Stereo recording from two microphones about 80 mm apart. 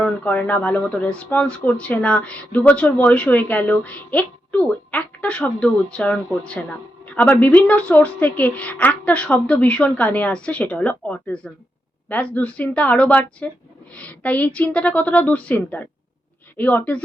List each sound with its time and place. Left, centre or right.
0.0 s a woman's voice: centre